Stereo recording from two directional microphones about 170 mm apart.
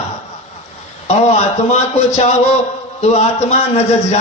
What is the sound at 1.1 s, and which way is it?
A man's voice, 40° left (ahead or behind).